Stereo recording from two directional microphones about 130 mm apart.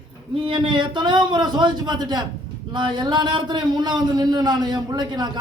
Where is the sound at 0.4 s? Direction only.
40° right (ahead or behind).